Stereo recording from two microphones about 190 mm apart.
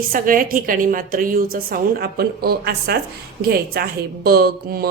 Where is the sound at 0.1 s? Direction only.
45° right (ahead or behind).